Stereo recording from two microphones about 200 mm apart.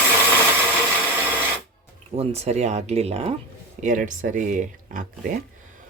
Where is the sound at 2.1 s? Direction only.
30° right (ahead or behind).